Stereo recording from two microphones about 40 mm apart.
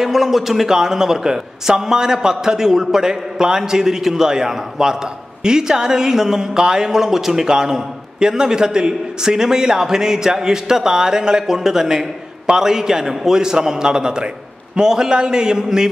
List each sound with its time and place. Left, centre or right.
0.0 s a man's voice: centre